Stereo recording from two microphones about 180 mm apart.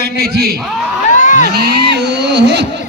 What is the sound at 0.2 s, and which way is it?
Speech, 60° right (ahead or behind).